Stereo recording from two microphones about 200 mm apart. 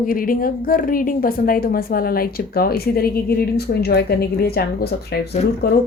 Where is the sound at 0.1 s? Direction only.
45° left (ahead or behind).